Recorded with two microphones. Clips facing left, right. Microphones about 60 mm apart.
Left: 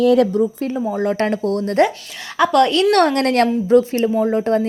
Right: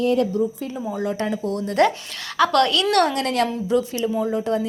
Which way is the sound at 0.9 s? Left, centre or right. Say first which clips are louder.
Left 4 dB; left.